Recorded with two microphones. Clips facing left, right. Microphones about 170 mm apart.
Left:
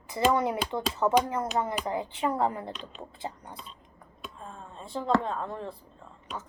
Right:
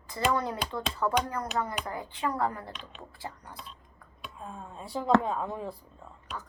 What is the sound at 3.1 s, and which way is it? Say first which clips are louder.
Speech: left 3 dB; 20° left (ahead or behind).